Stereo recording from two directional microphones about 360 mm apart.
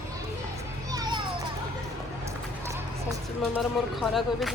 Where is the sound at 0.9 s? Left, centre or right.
Centre.